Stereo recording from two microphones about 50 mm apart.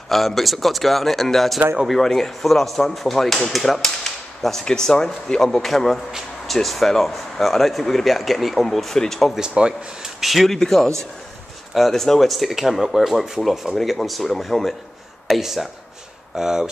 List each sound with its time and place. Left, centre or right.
0.1 s speech: centre
9.5 s speech: centre
10.0 s a man's voice: centre